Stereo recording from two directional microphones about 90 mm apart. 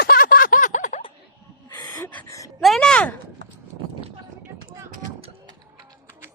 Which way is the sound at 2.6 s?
5° left (ahead or behind).